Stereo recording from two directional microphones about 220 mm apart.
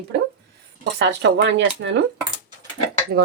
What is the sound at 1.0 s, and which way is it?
Speech, 50° right (ahead or behind).